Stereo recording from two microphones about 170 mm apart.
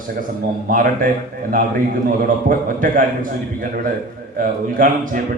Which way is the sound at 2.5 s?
55° right (ahead or behind).